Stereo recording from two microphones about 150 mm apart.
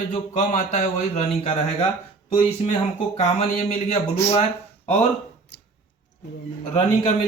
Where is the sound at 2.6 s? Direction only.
55° left (ahead or behind).